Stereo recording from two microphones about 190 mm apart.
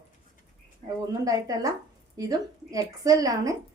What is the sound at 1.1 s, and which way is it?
A woman's voice, 20° right (ahead or behind).